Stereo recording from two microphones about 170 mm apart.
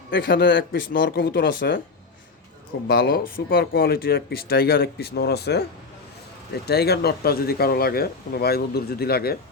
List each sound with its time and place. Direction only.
0.1 s speech: 90° left; by 1.8 s 70° left (ahead or behind)
2.8 s speech: 70° left (ahead or behind)
6.7 s speech: 70° left (ahead or behind)